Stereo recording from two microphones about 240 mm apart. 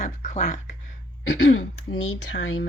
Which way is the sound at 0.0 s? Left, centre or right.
Left.